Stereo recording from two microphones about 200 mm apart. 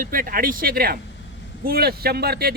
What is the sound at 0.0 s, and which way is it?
Speech, 45° right (ahead or behind).